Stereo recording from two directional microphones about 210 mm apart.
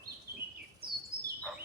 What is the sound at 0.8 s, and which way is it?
Bird, 45° right (ahead or behind).